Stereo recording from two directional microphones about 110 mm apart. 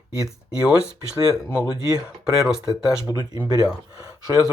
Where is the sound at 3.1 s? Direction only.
40° right (ahead or behind).